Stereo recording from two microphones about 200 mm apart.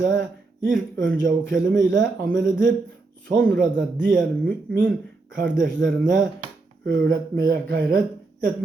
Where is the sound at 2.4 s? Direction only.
45° right (ahead or behind).